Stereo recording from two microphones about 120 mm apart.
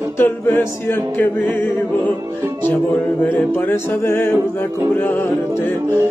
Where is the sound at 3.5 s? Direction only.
20° left (ahead or behind).